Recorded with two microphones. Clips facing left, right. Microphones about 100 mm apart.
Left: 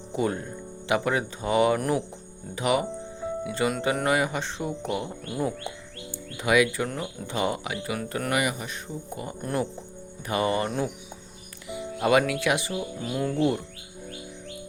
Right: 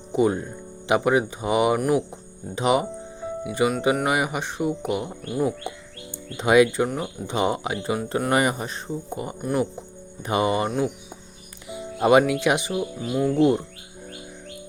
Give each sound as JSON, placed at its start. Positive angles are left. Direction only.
{"t": 0.1, "sound": "speech", "side_deg": -20}
{"t": 8.3, "sound": "speech", "side_deg": -35}
{"t": 9.4, "sound": "speech", "side_deg": -5}
{"t": 10.2, "sound": "speech", "side_deg": -20}
{"t": 11.7, "sound": "speech", "side_deg": -25}
{"t": 13.0, "sound": "speech", "side_deg": -5}